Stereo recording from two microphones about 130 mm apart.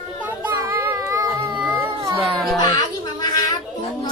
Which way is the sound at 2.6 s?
30° left (ahead or behind).